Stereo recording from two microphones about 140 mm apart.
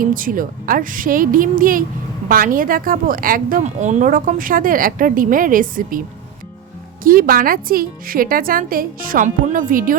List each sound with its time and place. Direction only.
0.0 s a woman's voice: 80° right
7.0 s speech: 90° right